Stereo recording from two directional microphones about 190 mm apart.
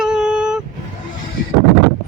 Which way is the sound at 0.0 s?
5° right (ahead or behind).